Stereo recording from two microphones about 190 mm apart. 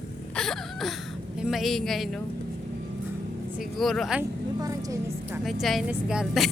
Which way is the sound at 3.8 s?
Centre (ahead or behind).